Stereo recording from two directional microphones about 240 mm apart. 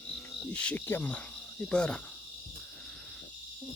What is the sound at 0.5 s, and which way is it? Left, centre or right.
Cricket, centre.